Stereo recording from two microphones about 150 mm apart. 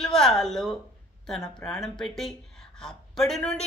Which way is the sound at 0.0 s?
5° left (ahead or behind).